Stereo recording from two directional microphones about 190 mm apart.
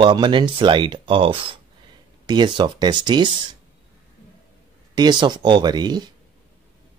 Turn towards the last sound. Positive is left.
turn(degrees=-20)  # may be behind; listen again after turning